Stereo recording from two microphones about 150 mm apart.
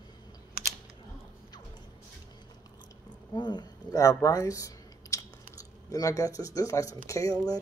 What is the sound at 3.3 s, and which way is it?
Speech, 30° left (ahead or behind).